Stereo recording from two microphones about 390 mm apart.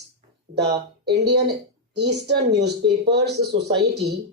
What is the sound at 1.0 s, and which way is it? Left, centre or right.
Speech, right.